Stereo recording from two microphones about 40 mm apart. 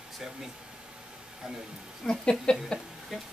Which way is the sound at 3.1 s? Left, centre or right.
Centre.